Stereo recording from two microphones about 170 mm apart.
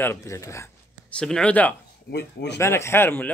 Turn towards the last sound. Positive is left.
turn(degrees=10)  # may be behind; listen again after turning